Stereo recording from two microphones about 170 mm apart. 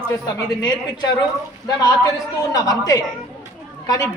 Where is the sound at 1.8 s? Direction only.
20° left (ahead or behind).